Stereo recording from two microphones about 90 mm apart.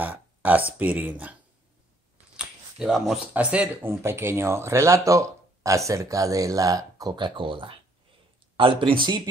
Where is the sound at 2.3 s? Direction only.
5° right (ahead or behind).